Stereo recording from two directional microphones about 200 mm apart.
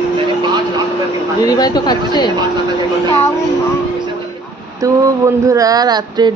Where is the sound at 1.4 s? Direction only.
20° left (ahead or behind).